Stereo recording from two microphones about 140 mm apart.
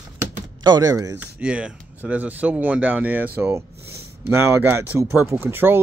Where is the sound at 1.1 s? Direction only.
10° right (ahead or behind).